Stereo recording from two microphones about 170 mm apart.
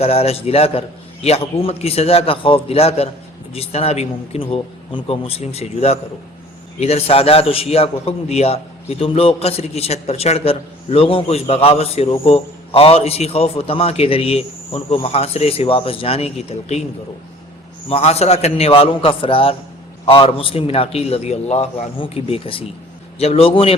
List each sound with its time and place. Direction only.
0.0 s a man's voice: 35° left (ahead or behind)
17.8 s a man's voice: 35° left (ahead or behind)